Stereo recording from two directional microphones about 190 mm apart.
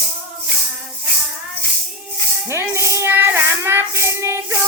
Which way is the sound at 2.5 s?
15° right (ahead or behind).